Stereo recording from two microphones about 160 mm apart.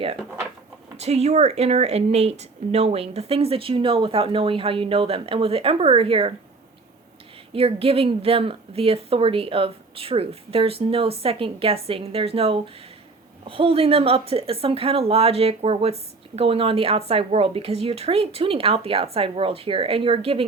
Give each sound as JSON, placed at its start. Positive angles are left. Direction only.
{"t": 0.9, "sound": "speech", "side_deg": -40}
{"t": 7.5, "sound": "speech", "side_deg": -35}